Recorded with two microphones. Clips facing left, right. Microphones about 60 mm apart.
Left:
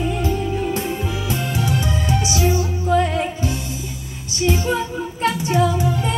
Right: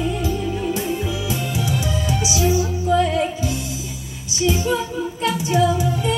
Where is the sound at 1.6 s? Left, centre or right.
Left.